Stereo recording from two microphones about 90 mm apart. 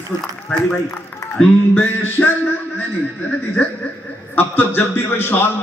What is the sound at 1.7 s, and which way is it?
Music, 15° left (ahead or behind).